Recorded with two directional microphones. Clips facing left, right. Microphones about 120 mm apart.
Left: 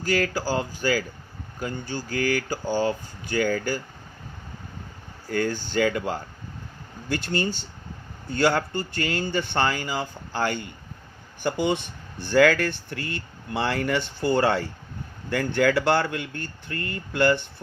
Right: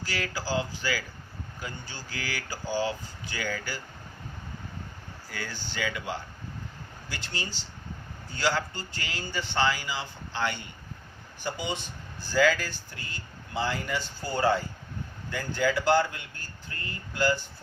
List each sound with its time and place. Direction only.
0.0 s speech: 50° left (ahead or behind)
5.3 s speech: 50° left (ahead or behind)
11.4 s speech: 60° left (ahead or behind)